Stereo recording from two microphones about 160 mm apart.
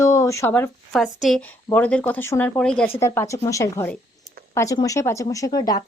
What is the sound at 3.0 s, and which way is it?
A woman's voice, 20° left (ahead or behind).